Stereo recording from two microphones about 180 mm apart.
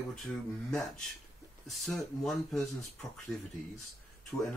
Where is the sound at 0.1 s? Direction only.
Centre (ahead or behind).